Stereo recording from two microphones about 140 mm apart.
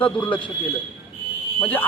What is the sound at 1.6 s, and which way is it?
Speech, 10° left (ahead or behind).